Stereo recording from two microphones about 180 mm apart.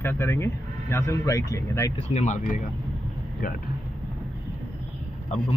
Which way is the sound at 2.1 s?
40° left (ahead or behind).